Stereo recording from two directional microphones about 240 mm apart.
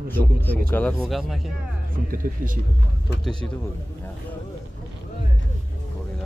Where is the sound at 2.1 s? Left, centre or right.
Right.